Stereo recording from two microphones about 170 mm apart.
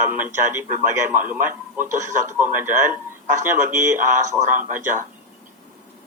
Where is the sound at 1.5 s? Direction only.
10° right (ahead or behind).